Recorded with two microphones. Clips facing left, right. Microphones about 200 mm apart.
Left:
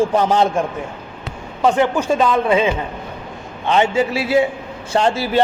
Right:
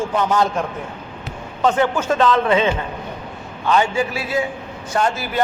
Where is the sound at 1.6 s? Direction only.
10° left (ahead or behind).